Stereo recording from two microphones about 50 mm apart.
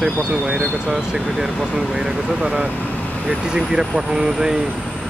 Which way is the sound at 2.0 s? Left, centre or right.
Centre.